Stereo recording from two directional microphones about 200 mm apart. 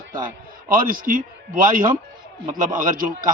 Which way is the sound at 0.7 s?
45° right (ahead or behind).